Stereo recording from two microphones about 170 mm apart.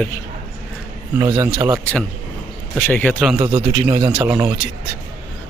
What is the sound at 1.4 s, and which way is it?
Speech, 10° right (ahead or behind).